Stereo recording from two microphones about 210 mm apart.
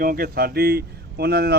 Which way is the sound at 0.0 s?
45° right (ahead or behind).